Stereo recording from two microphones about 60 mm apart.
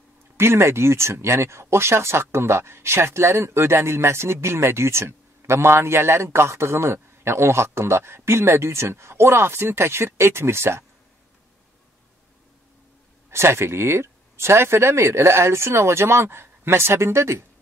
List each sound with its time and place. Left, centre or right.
0.4 s speech: right
13.3 s speech: right